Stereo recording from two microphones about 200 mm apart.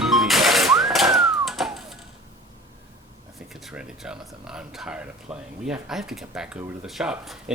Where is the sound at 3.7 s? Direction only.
5° right (ahead or behind).